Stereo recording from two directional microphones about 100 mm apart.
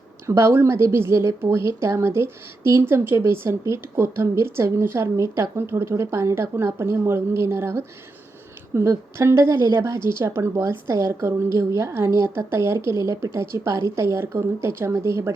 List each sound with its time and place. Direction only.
0.3 s a woman's voice: 25° right (ahead or behind)